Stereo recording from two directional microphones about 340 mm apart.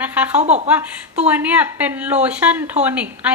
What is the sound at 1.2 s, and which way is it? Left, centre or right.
A woman's voice, centre.